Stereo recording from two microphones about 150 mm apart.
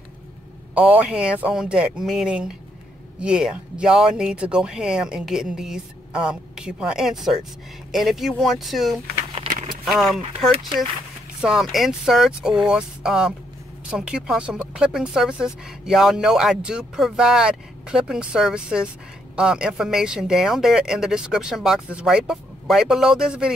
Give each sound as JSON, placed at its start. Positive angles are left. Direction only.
{"t": 0.7, "sound": "speech", "side_deg": -10}
{"t": 9.5, "sound": "a sound", "side_deg": -40}
{"t": 9.8, "sound": "speech", "side_deg": 0}